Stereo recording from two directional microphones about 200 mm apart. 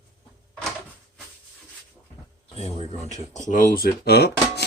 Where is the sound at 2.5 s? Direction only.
30° left (ahead or behind).